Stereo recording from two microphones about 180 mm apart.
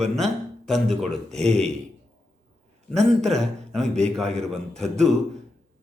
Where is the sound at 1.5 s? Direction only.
40° right (ahead or behind).